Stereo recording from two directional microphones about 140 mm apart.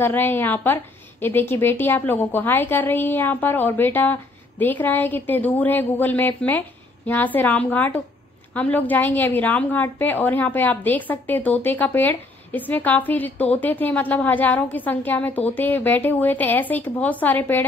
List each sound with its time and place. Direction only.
0.0 s a woman's voice: 15° left (ahead or behind)